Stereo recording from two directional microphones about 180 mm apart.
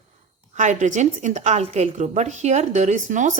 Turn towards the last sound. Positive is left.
turn(degrees=-45)  # may be behind; listen again after turning